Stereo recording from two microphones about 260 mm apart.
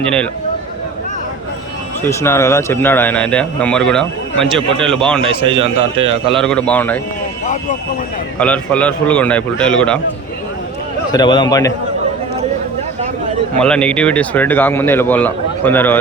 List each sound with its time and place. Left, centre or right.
2.0 s speech: centre
5.3 s a man's voice: right
6.3 s speech: centre
8.4 s speech: centre
11.1 s speech: centre
13.6 s speech: centre